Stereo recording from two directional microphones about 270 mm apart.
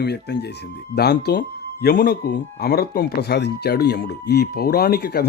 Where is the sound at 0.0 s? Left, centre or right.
Left.